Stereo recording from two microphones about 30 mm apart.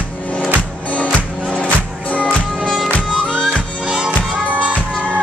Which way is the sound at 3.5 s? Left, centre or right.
Right.